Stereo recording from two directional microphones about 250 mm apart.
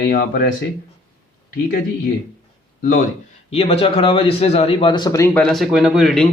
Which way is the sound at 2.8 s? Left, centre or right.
Left.